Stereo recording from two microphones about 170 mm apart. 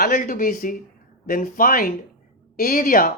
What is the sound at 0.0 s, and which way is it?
Speech, 55° left (ahead or behind).